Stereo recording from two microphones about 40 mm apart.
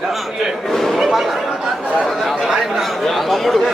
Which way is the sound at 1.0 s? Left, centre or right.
Centre.